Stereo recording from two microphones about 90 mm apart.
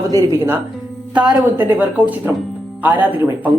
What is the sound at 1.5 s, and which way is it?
Speech, 25° right (ahead or behind).